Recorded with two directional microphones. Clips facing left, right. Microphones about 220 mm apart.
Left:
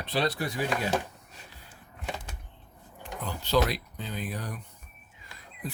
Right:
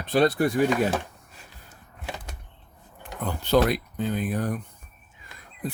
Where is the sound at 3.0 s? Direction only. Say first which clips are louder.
Right 5 dB; 55° right (ahead or behind).